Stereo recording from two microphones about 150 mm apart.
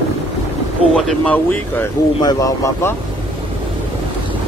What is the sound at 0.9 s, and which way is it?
Speech, 5° left (ahead or behind).